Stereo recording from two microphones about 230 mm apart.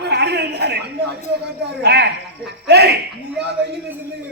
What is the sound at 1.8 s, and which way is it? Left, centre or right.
A man's voice, right.